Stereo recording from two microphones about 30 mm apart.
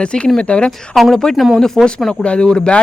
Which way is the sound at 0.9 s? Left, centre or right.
Centre.